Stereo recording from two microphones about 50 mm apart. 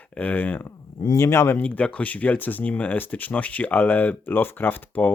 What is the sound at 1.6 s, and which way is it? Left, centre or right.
Speech, left.